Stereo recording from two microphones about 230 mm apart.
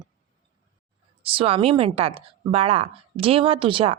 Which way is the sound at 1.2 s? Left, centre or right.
Right.